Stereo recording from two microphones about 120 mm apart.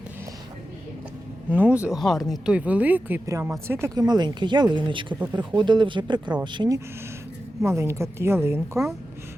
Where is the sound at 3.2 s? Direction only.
25° right (ahead or behind).